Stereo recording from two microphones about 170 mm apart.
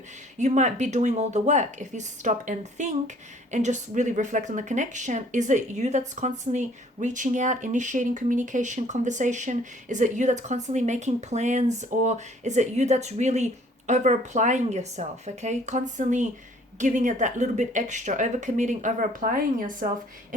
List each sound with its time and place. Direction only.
0.3 s speech: 45° right (ahead or behind)